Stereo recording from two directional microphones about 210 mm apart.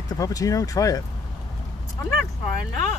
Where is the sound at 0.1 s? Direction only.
15° left (ahead or behind).